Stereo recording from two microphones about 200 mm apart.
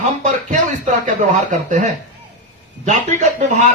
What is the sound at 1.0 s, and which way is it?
Speech, 40° right (ahead or behind).